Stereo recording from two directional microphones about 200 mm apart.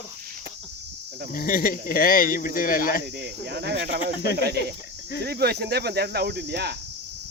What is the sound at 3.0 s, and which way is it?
Speech, 55° right (ahead or behind).